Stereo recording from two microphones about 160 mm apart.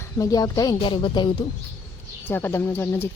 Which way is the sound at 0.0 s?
20° left (ahead or behind).